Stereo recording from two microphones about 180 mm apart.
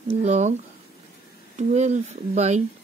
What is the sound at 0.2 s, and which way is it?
Speech, 40° right (ahead or behind).